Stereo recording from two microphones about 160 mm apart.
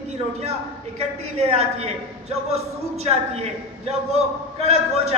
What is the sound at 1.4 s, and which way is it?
Speech, 40° right (ahead or behind).